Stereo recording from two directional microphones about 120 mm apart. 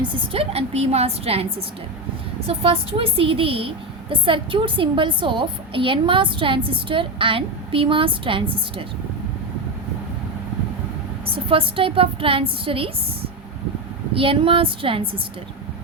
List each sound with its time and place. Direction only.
0.3 s a woman's voice: 60° right (ahead or behind)
11.3 s a woman's voice: 45° right (ahead or behind)
14.1 s a woman's voice: 50° right (ahead or behind)